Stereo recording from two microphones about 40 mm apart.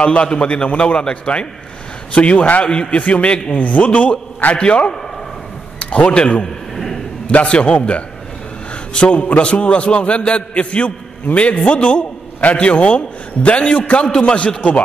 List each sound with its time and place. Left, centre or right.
0.1 s a man's voice: left
2.6 s a man's voice: left
3.0 s a man's voice: left
4.6 s a man's voice: left